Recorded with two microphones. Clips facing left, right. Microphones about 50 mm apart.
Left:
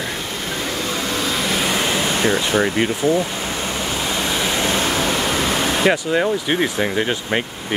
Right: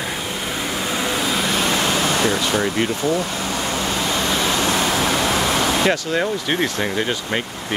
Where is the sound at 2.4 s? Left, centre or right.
Left.